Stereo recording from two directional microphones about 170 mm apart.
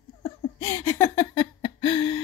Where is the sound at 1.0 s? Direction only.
25° left (ahead or behind).